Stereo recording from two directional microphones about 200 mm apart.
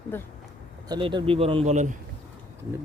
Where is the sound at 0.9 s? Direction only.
25° right (ahead or behind).